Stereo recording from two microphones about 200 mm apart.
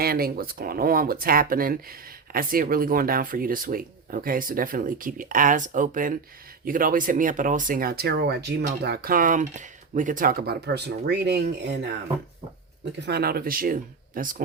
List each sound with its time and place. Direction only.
0.0 s speech: 50° right (ahead or behind)
12.8 s speech: 55° right (ahead or behind)